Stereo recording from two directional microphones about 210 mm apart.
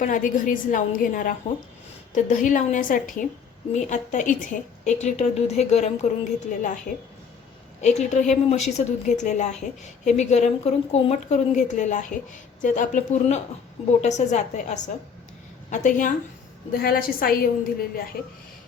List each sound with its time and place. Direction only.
0.0 s a woman's voice: 40° left (ahead or behind)
7.8 s a woman's voice: 35° left (ahead or behind)